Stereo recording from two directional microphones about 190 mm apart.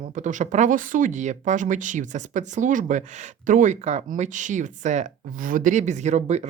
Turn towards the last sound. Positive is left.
turn(degrees=-40)  # may be behind; listen again after turning